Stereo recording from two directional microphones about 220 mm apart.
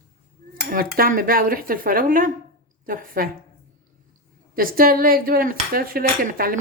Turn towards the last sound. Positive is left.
turn(degrees=-40)  # may be behind; listen again after turning